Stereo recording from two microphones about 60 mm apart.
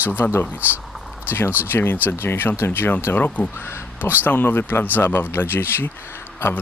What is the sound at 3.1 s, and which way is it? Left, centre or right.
A man's voice, left.